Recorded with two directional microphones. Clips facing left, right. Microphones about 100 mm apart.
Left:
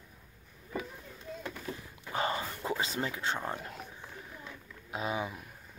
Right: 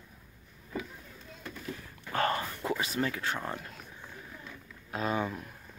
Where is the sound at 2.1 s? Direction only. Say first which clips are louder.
Right 3 dB; 15° left (ahead or behind).